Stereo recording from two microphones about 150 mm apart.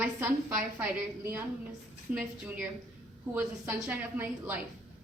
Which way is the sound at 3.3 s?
20° right (ahead or behind).